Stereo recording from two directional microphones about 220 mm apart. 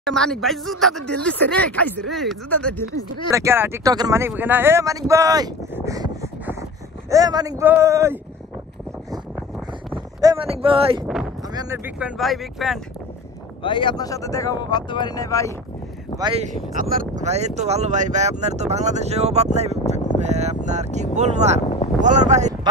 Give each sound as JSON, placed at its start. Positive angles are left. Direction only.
{"t": 0.0, "sound": "speech", "side_deg": 5}
{"t": 3.3, "sound": "speech", "side_deg": -15}
{"t": 10.2, "sound": "speech", "side_deg": -25}
{"t": 11.5, "sound": "speech", "side_deg": -10}
{"t": 13.6, "sound": "speech", "side_deg": 20}
{"t": 16.2, "sound": "speech", "side_deg": -20}
{"t": 16.9, "sound": "speech", "side_deg": -35}